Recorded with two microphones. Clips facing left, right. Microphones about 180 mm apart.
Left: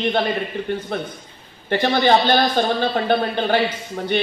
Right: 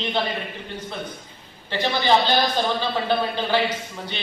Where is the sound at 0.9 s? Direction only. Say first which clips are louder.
Left 6 dB; 60° left (ahead or behind).